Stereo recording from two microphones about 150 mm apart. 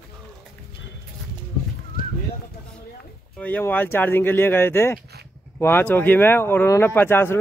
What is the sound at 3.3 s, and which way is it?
Speech, 10° left (ahead or behind).